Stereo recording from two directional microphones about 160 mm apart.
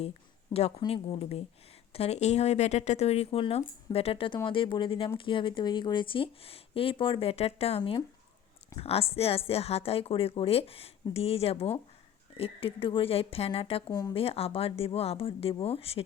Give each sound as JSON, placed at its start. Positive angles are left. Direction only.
{"t": 0.8, "sound": "speech", "side_deg": 30}
{"t": 7.8, "sound": "speech", "side_deg": 25}
{"t": 8.8, "sound": "speech", "side_deg": 40}